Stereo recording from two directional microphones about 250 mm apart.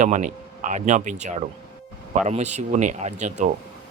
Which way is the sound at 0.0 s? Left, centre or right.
Right.